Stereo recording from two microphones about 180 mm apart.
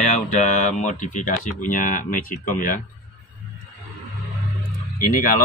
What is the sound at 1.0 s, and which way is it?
Speech, 45° left (ahead or behind).